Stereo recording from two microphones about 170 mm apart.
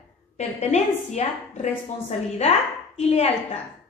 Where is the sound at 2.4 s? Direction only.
40° left (ahead or behind).